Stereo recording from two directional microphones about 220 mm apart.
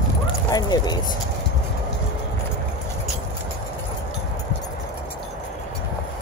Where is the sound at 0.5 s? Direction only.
20° left (ahead or behind).